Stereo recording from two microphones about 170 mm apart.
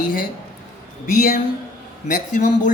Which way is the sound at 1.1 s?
55° left (ahead or behind).